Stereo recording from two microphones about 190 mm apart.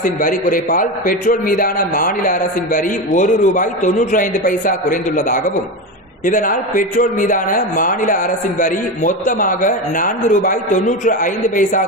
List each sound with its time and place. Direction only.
0.0 s a man's voice: 45° left (ahead or behind)